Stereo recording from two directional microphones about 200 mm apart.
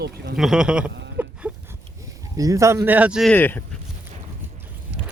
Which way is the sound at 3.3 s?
10° left (ahead or behind).